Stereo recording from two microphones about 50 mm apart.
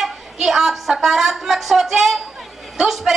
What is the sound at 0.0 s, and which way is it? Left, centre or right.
A woman's voice, centre.